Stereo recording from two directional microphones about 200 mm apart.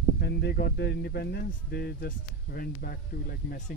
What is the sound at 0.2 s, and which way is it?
Speech, 55° left (ahead or behind).